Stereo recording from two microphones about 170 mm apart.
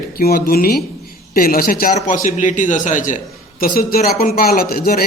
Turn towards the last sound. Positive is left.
turn(degrees=60)  # may be behind; listen again after turning